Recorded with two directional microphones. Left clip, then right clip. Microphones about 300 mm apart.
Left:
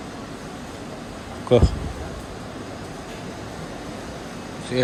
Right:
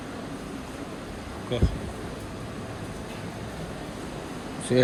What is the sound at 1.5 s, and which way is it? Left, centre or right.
Speech, centre.